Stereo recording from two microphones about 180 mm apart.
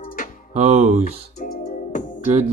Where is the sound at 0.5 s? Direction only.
40° right (ahead or behind).